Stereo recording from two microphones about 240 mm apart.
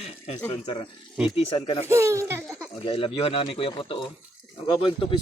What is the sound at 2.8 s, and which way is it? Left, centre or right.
Speech, left.